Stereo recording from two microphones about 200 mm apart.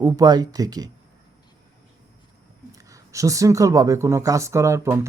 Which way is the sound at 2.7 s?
15° right (ahead or behind).